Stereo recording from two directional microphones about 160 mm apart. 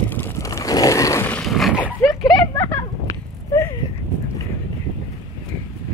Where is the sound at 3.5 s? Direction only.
20° left (ahead or behind).